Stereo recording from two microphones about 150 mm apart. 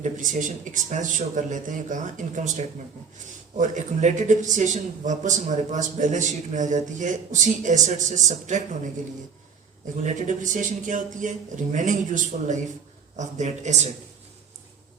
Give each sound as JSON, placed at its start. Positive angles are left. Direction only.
{"t": 0.0, "sound": "a man's voice", "side_deg": -60}
{"t": 10.0, "sound": "a man's voice", "side_deg": -55}